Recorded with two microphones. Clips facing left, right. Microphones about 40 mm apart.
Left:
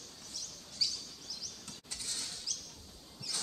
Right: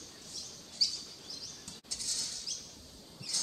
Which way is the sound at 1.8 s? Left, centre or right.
Left.